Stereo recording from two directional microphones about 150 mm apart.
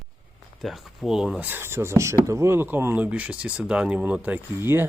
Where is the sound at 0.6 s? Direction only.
Centre (ahead or behind).